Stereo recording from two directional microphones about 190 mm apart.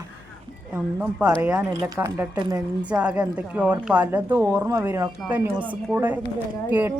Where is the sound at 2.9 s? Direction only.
5° right (ahead or behind).